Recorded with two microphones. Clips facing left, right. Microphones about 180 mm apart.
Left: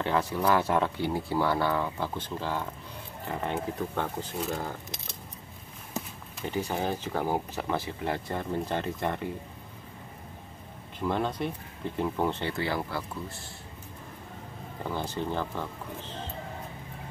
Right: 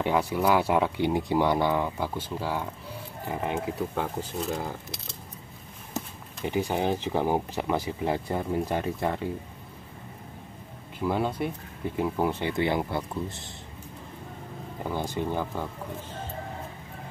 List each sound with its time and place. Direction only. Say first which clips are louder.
0.0 s speech: right 2 dB; 10° right (ahead or behind)
5.9 s a sound: right 2 dB; 10° right (ahead or behind)
6.7 s speech: right 4 dB; 15° right (ahead or behind)
11.0 s speech: right 2 dB; 10° right (ahead or behind)
14.8 s speech: right 2 dB; 15° right (ahead or behind)